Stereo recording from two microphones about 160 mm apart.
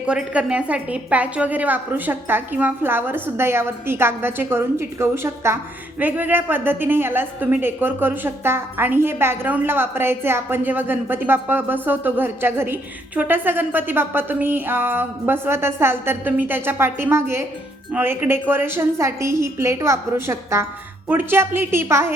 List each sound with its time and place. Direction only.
0.0 s a woman's voice: 5° right (ahead or behind)